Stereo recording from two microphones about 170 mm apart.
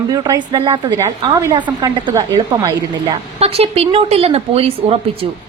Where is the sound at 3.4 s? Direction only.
35° right (ahead or behind).